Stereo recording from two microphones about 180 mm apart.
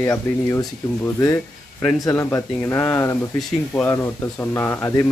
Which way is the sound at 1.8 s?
Centre (ahead or behind).